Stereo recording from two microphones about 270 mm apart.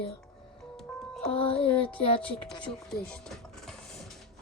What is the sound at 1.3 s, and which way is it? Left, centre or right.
Speech, left.